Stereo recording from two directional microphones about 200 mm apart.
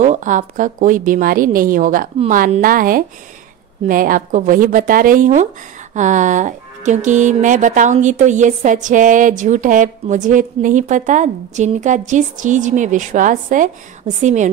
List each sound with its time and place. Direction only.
0.0 s speech: 35° right (ahead or behind)